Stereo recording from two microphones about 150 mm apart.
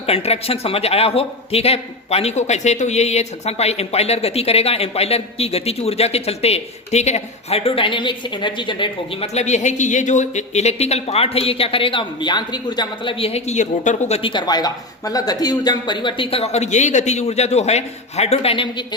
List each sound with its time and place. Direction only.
0.0 s a man's voice: 40° left (ahead or behind)
9.2 s a man's voice: 45° left (ahead or behind)
14.2 s speech: 35° left (ahead or behind)